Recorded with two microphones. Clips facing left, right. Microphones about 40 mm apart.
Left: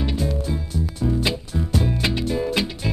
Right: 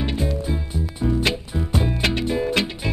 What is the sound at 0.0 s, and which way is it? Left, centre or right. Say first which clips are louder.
Music: even; centre.